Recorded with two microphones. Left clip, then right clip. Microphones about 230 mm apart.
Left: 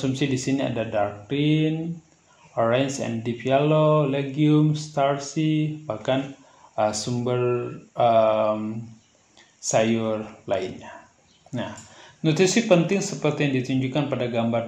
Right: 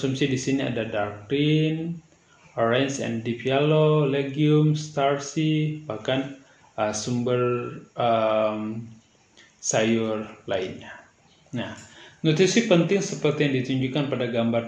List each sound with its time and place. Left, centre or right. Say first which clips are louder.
0.0 s speech: even; left
9.6 s speech: left 1 dB; left